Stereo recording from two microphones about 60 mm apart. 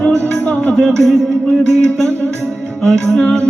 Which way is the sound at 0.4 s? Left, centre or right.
Centre.